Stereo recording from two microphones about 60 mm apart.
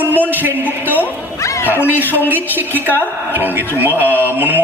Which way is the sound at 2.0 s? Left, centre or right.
Left.